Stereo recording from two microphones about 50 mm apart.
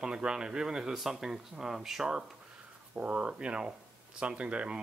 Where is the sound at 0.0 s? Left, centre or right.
Centre.